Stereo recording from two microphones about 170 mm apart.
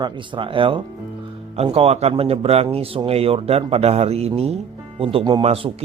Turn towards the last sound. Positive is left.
turn(degrees=-30)  # may be behind; listen again after turning